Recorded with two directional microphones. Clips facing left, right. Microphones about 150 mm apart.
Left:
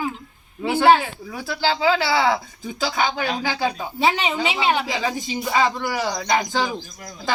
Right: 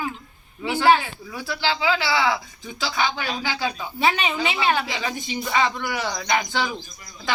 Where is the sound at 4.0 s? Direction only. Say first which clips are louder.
Left 1 dB; 25° left (ahead or behind).